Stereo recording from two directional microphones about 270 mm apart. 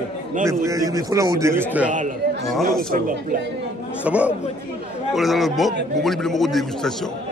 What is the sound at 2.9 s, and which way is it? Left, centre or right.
Speech, right.